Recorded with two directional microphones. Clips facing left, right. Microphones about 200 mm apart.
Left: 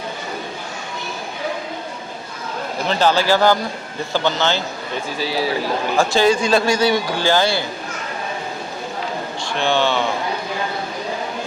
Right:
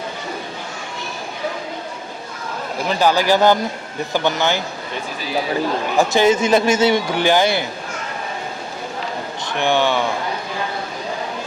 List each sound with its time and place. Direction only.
2.8 s speech: 10° right (ahead or behind)
6.0 s a man's voice: 20° right (ahead or behind)
9.6 s speech: 15° right (ahead or behind)